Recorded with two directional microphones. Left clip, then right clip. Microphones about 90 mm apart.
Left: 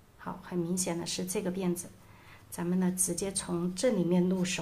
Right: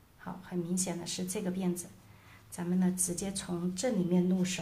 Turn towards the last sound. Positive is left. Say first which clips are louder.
# left 2 dB
turn(degrees=45)  # may be behind; listen again after turning